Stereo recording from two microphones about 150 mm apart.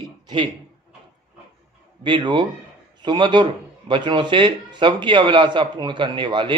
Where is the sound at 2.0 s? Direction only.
30° right (ahead or behind).